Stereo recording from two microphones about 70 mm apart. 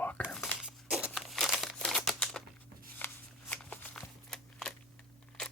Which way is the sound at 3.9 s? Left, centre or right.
Centre.